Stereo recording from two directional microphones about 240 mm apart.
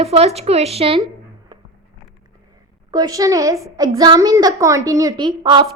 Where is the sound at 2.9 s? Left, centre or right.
Centre.